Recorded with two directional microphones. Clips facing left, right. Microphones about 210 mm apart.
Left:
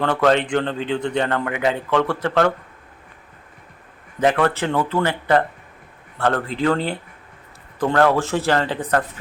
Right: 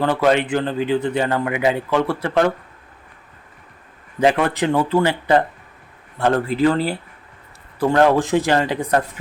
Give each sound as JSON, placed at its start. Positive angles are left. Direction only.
{"t": 0.0, "sound": "a man's voice", "side_deg": -5}
{"t": 4.2, "sound": "a man's voice", "side_deg": -10}